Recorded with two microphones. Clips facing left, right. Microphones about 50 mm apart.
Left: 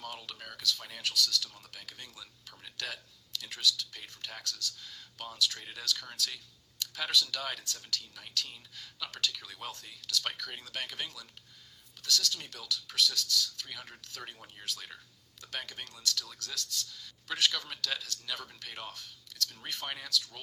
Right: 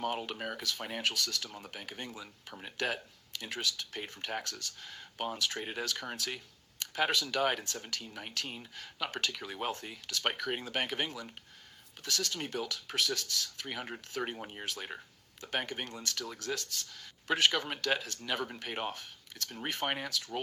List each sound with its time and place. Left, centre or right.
0.0 s speech: right